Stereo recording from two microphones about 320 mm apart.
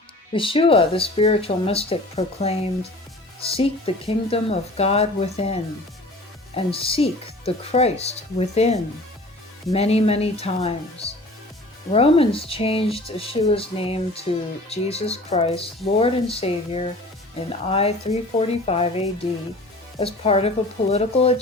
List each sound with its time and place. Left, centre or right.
0.3 s speech: centre